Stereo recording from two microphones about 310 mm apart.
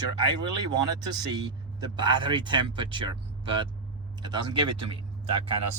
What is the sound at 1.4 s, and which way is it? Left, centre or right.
Speech, centre.